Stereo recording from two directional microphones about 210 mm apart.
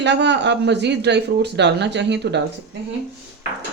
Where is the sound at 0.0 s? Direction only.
55° right (ahead or behind).